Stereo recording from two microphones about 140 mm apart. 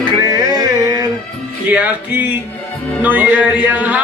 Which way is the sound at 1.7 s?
10° right (ahead or behind).